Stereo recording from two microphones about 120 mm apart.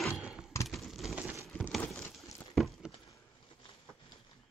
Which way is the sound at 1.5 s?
15° left (ahead or behind).